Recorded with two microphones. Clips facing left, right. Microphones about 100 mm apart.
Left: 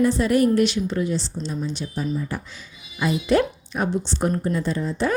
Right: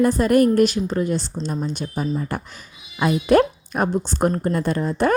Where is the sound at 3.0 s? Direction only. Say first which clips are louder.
Right 4 dB; 50° right (ahead or behind).